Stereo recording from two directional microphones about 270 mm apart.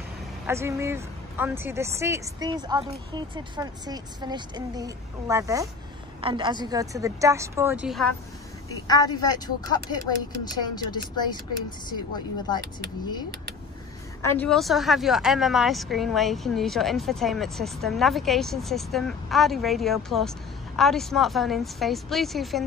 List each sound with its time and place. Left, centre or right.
0.5 s speech: centre
8.8 s a woman's voice: centre
14.2 s speech: centre